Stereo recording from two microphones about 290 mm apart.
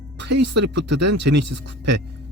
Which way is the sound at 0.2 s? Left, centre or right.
Right.